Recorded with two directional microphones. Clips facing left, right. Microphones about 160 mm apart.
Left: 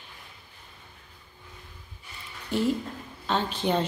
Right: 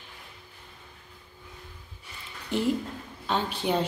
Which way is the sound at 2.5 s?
20° right (ahead or behind).